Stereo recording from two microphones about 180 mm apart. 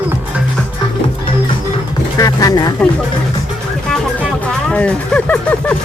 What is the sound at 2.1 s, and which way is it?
Vehicle, 20° left (ahead or behind).